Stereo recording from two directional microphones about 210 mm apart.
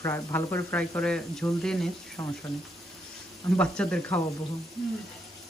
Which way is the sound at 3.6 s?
5° left (ahead or behind).